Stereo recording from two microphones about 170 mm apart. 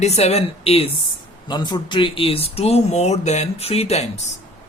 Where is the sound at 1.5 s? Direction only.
25° left (ahead or behind).